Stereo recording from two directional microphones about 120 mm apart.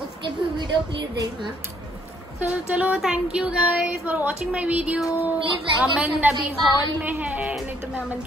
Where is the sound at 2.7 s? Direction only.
10° right (ahead or behind).